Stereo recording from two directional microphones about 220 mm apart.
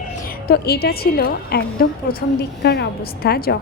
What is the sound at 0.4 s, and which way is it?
A woman's voice, 45° left (ahead or behind).